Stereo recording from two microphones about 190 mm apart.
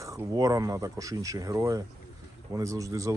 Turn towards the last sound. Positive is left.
turn(degrees=-15)  # may be behind; listen again after turning